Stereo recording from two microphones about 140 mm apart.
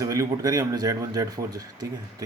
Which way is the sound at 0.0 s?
25° right (ahead or behind).